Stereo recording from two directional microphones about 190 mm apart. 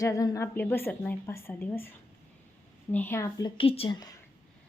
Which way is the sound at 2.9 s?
10° left (ahead or behind).